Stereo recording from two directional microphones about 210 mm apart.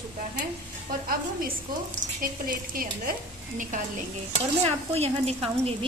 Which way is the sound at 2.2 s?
45° right (ahead or behind).